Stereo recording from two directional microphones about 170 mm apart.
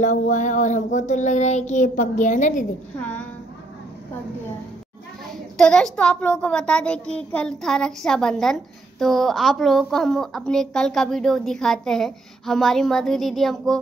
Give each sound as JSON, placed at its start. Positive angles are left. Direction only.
{"t": 0.0, "sound": "speech", "side_deg": 45}
{"t": 3.0, "sound": "a woman's voice", "side_deg": 10}
{"t": 5.6, "sound": "a woman's voice", "side_deg": 5}